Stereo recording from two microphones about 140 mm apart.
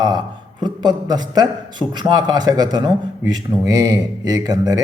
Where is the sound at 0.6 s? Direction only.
30° right (ahead or behind).